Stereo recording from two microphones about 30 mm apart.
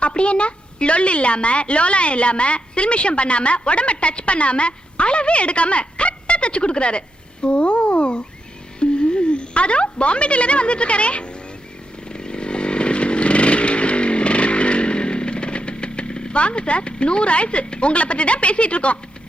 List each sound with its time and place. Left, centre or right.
0.0 s a woman's voice: left
7.4 s a sound: left
8.8 s speech: left
12.0 s chainsaw: left
16.4 s a woman's voice: left